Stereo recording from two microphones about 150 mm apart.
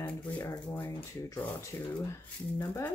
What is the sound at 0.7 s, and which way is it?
Speech, 15° left (ahead or behind).